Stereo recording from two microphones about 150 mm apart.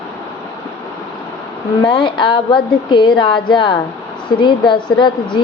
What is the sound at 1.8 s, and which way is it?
A woman's voice, 30° left (ahead or behind).